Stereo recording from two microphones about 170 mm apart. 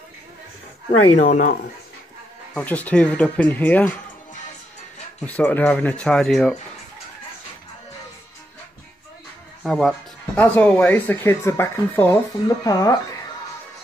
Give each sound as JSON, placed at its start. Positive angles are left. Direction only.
{"t": 1.2, "sound": "speech", "side_deg": 50}
{"t": 2.5, "sound": "speech", "side_deg": 10}
{"t": 5.2, "sound": "speech", "side_deg": 10}
{"t": 9.6, "sound": "speech", "side_deg": 0}